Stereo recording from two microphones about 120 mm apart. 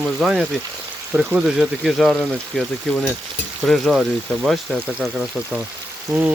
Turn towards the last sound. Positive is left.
turn(degrees=-15)  # may be behind; listen again after turning